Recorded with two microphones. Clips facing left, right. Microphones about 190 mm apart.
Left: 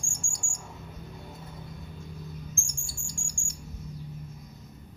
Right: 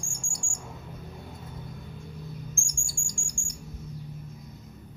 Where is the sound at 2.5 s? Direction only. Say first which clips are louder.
Right 1 dB; 15° right (ahead or behind).